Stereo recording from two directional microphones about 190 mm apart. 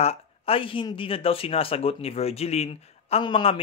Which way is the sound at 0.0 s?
30° left (ahead or behind).